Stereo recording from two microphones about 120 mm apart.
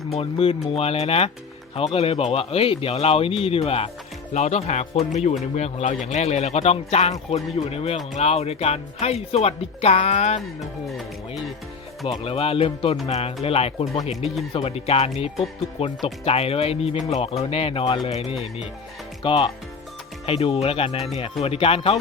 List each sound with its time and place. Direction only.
0.1 s speech: 55° left (ahead or behind)
10.4 s speech: centre (ahead or behind)
12.2 s speech: 55° left (ahead or behind)
14.0 s speech: 70° left (ahead or behind)
14.5 s speech: 55° left (ahead or behind)
19.2 s speech: 45° left (ahead or behind)